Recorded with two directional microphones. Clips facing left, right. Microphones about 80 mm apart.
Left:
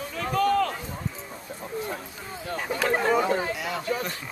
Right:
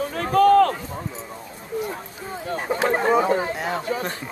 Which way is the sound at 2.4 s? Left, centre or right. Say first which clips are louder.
Right 4 dB; right.